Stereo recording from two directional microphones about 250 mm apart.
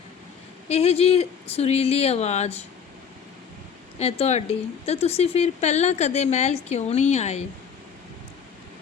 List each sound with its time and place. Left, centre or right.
0.7 s speech: left
3.9 s speech: left